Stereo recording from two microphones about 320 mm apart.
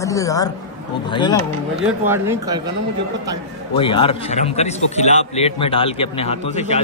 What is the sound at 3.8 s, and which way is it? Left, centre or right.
A man's voice, centre.